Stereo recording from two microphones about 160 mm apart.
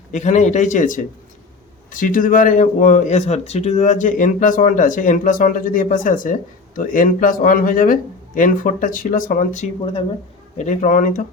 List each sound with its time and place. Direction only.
0.1 s speech: 50° left (ahead or behind)